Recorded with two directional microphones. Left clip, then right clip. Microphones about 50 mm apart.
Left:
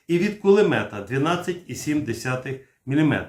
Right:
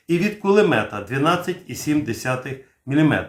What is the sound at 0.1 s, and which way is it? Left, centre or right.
Speech, right.